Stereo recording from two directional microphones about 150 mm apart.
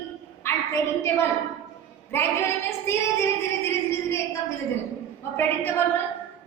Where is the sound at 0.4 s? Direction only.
15° left (ahead or behind).